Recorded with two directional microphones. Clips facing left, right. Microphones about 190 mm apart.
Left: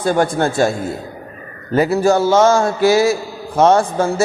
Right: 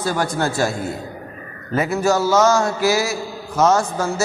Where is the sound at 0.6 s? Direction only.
25° left (ahead or behind).